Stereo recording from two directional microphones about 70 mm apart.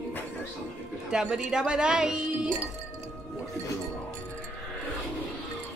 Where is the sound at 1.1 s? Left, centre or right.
Centre.